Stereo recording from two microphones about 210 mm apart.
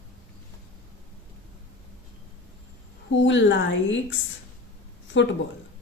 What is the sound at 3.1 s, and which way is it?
Speech, 60° left (ahead or behind).